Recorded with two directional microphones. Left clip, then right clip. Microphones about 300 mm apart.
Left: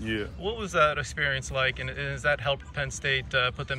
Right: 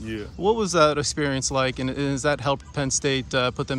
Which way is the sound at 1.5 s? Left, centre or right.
Centre.